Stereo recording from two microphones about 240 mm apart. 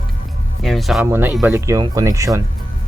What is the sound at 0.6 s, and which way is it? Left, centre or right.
Speech, centre.